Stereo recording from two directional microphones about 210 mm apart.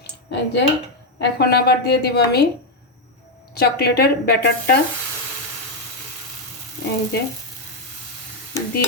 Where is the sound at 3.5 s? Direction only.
50° left (ahead or behind).